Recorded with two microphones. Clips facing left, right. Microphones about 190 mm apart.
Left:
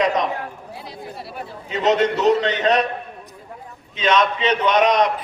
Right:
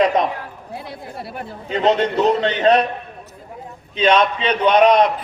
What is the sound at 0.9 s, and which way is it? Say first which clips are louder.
Speech: right 2 dB; 55° right (ahead or behind).